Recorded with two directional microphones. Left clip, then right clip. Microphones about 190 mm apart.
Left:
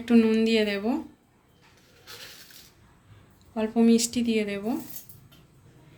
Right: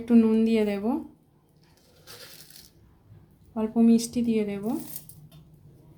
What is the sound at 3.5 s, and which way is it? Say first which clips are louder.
Speech: left 1 dB; 45° right (ahead or behind).